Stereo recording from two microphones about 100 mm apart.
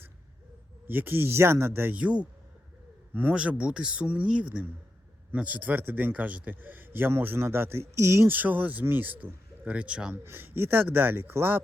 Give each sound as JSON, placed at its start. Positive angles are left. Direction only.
{"t": 0.9, "sound": "a man's voice", "side_deg": -20}
{"t": 8.4, "sound": "a man's voice", "side_deg": -15}
{"t": 10.2, "sound": "a man's voice", "side_deg": -20}